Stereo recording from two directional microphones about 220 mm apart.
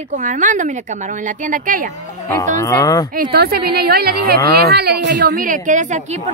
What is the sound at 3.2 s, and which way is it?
A woman's voice, 45° right (ahead or behind).